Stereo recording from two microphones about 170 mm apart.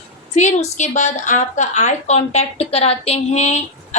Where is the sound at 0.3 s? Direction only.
40° left (ahead or behind).